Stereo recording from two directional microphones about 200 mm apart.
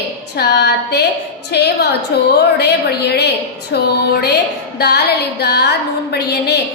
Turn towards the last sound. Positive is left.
turn(degrees=55)  # may be behind; listen again after turning